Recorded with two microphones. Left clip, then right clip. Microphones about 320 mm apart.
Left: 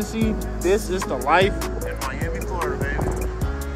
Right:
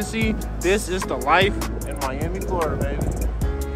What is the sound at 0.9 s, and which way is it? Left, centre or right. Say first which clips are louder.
Speech: even; right.